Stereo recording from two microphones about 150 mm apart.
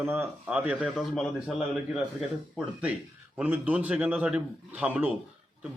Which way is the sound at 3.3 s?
10° right (ahead or behind).